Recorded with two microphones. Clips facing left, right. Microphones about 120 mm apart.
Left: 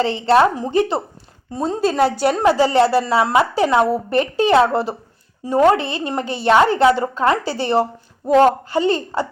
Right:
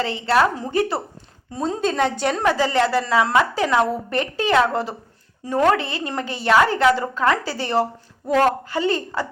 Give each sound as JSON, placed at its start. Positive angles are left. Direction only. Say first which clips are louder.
{"t": 0.0, "sound": "a woman's voice", "louder": "left 4 dB", "side_deg": 25}
{"t": 1.5, "sound": "a woman's voice", "louder": "left 4 dB", "side_deg": 0}
{"t": 2.4, "sound": "a woman's voice", "louder": "left 5 dB", "side_deg": 20}